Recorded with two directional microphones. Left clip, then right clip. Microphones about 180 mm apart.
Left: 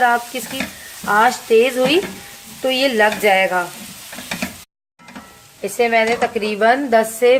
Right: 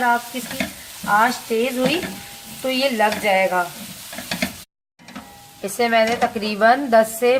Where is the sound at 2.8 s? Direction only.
65° left (ahead or behind).